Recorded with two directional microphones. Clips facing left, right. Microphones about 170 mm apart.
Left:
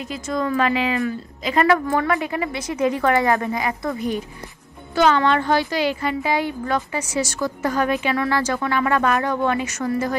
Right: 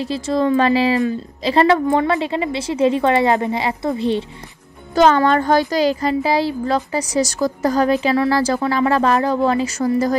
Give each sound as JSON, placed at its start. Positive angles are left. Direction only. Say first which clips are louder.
{"t": 0.0, "sound": "a woman's voice", "louder": "right 6 dB", "side_deg": -30}
{"t": 4.9, "sound": "a woman's voice", "louder": "right 4 dB", "side_deg": -40}